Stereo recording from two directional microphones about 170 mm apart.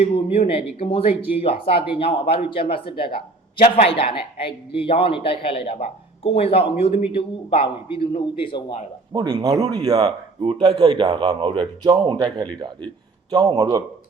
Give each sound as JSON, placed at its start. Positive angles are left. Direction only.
{"t": 0.0, "sound": "a man's voice", "side_deg": 35}
{"t": 9.1, "sound": "a man's voice", "side_deg": -25}
{"t": 10.4, "sound": "a man's voice", "side_deg": -35}